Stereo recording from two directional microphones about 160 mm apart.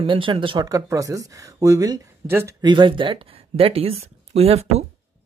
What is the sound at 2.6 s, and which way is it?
Speech, 30° right (ahead or behind).